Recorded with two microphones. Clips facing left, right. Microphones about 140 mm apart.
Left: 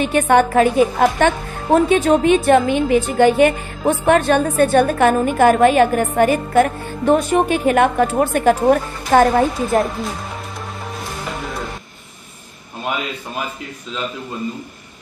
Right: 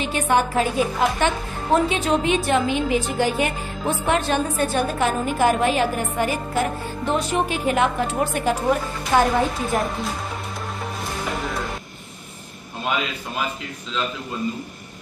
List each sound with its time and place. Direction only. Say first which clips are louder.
0.0 s speech: left 6 dB; 55° left (ahead or behind)